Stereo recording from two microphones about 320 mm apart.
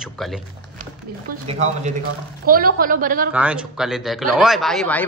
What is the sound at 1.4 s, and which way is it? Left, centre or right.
Speech, right.